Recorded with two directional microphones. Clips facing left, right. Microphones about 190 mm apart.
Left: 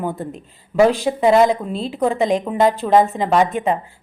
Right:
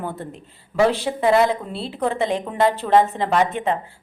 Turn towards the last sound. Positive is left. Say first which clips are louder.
# left 3 dB
turn(degrees=15)  # may be behind; listen again after turning